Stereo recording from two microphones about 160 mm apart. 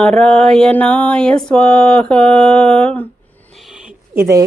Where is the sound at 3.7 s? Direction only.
15° right (ahead or behind).